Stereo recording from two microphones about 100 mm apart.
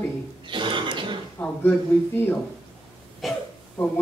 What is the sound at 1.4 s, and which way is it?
A man's voice, 20° left (ahead or behind).